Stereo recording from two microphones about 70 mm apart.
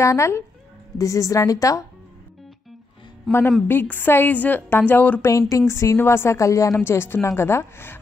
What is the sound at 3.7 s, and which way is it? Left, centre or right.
Speech, left.